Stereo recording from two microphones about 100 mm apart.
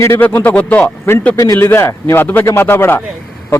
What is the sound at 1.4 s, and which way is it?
A man's voice, 30° left (ahead or behind).